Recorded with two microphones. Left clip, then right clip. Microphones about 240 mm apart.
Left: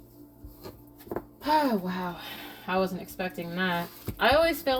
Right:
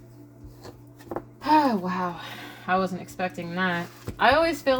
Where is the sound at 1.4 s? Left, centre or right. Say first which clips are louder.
Right 4 dB; right.